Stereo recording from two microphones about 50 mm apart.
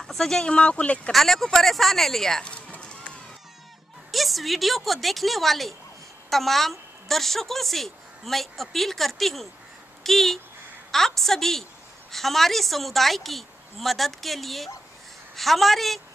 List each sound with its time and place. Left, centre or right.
0.0 s speech: centre; by 1.1 s left
1.1 s a woman's voice: centre
2.4 s a sound: left
4.1 s a woman's voice: centre